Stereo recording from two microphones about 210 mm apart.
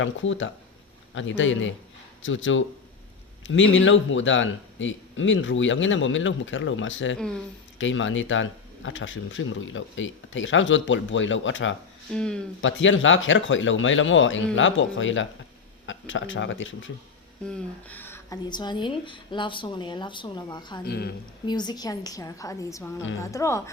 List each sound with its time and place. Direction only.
0.0 s speech: 65° left (ahead or behind)
12.1 s speech: 5° left (ahead or behind)
12.6 s speech: 65° left (ahead or behind)
17.8 s speech: 10° left (ahead or behind)
20.8 s speech: 50° left (ahead or behind)
21.4 s a woman's voice: 20° left (ahead or behind)